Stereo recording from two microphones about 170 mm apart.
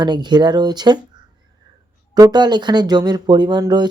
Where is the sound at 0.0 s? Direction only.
25° right (ahead or behind).